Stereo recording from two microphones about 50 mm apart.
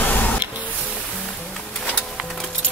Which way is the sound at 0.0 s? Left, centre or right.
Left.